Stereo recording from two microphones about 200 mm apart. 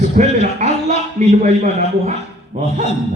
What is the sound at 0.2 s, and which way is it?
A man's voice, 35° right (ahead or behind).